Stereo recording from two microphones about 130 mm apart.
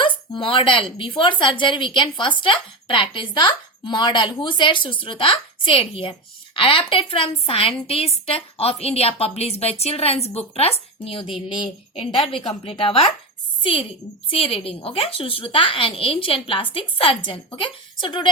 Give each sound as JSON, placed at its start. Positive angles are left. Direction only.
{"t": 0.0, "sound": "a woman's voice", "side_deg": 40}